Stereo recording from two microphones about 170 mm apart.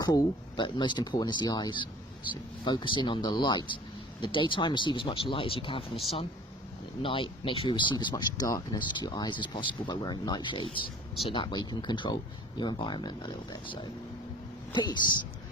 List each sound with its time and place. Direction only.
0.0 s speech: 20° left (ahead or behind)
7.0 s speech: 30° left (ahead or behind)